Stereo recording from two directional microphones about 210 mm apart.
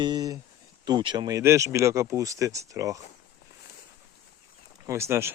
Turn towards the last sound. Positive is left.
turn(degrees=-10)  # may be behind; listen again after turning